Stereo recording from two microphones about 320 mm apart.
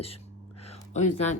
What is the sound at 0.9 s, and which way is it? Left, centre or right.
Speech, left.